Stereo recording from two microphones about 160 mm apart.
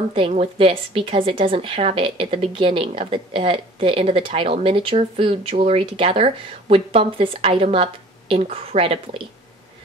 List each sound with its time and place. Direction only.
0.1 s speech: 35° right (ahead or behind)